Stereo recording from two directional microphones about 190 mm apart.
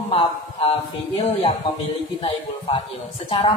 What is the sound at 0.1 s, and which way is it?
A woman's voice, 30° left (ahead or behind).